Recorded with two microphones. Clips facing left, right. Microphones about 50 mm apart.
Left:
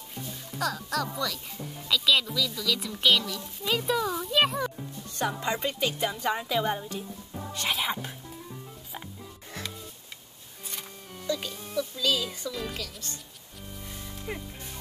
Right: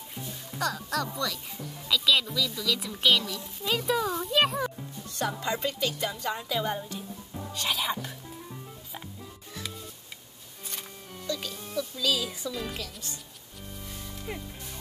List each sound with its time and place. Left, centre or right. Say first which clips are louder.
0.6 s speech: even; centre
5.2 s a woman's voice: left 1 dB; centre
6.8 s a woman's voice: left 1 dB; centre
10.7 s music: even; centre
11.2 s music: left 3 dB; centre
12.8 s speech: left 1 dB; centre
13.6 s music: even; centre